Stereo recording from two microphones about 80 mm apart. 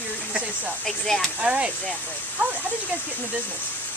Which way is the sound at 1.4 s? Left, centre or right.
Centre.